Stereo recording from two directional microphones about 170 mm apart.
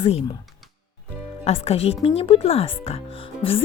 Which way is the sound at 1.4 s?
35° left (ahead or behind).